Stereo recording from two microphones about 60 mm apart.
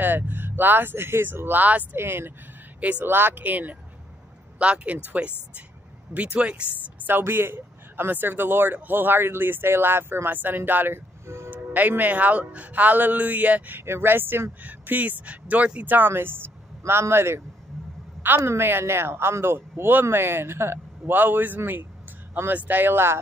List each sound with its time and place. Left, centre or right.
0.0 s speech: right
2.0 s speech: right
2.8 s a man's voice: right
7.1 s speech: right
11.2 s music: right
11.5 s a man's voice: right
14.7 s speech: right
18.4 s speech: right
21.0 s speech: right